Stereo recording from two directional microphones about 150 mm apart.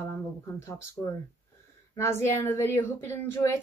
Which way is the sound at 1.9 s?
15° left (ahead or behind).